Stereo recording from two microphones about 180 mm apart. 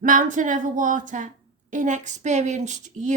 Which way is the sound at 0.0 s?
45° right (ahead or behind).